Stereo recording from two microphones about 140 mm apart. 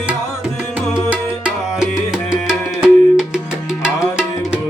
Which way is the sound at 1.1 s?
10° right (ahead or behind).